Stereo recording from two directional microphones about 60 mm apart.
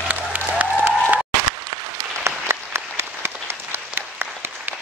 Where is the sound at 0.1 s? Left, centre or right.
Right.